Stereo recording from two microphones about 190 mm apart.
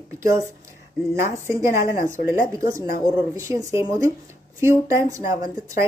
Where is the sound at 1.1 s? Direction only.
15° right (ahead or behind).